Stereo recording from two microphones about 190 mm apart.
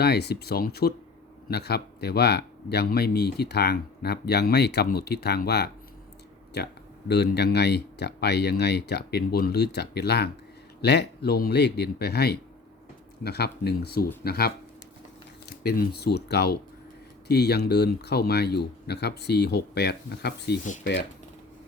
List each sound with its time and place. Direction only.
0.0 s speech: 60° left (ahead or behind)